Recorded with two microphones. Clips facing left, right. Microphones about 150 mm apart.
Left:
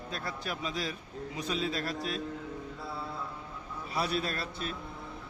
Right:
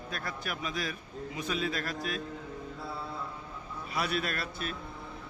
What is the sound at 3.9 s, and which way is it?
Speech, 30° left (ahead or behind).